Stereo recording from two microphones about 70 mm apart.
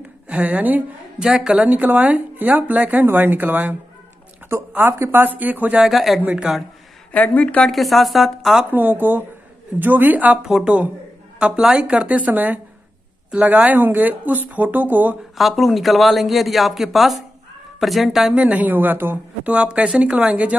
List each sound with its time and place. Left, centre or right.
0.3 s speech: right
1.2 s speech: centre
4.7 s speech: right
5.8 s speech: centre
6.2 s a woman's voice: centre
7.1 s a woman's voice: left
7.6 s speech: centre
8.7 s speech: right
10.4 s a woman's voice: centre; by 15.1 s right
15.3 s speech: centre
18.3 s speech: centre
19.4 s a woman's voice: centre